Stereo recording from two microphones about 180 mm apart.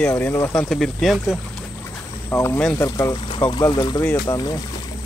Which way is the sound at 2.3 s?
15° left (ahead or behind).